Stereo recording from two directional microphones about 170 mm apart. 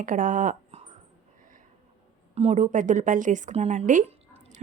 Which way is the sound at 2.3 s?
40° right (ahead or behind).